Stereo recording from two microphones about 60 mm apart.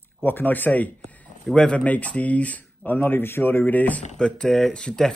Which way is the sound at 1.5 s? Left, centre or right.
Centre.